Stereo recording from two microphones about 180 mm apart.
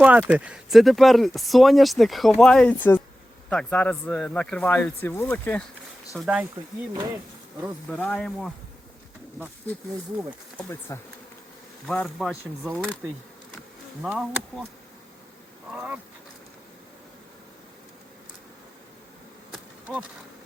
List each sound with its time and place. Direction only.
0.0 s speech: 10° right (ahead or behind); by 5.6 s 10° left (ahead or behind)
6.1 s speech: 5° right (ahead or behind)
6.9 s speech: 15° right (ahead or behind)
7.9 s speech: 5° left (ahead or behind)
10.6 s speech: 15° left (ahead or behind)
13.0 s speech: 15° right (ahead or behind)
15.7 s speech: 10° right (ahead or behind)
19.5 s bee: 5° right (ahead or behind)